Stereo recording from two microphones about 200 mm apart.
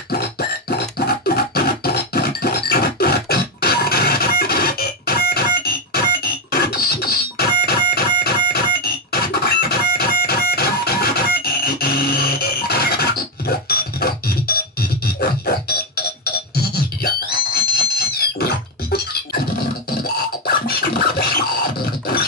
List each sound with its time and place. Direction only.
0.1 s music: 50° left (ahead or behind)
16.5 s beatboxing: 50° left (ahead or behind)
20.0 s scratching: 50° left (ahead or behind)